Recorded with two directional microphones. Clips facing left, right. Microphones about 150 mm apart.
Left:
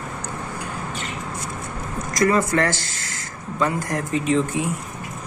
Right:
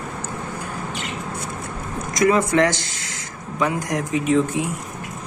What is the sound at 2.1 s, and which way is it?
Speech, 20° right (ahead or behind).